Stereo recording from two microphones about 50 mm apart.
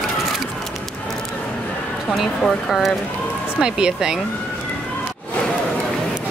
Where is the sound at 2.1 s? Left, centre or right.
Centre.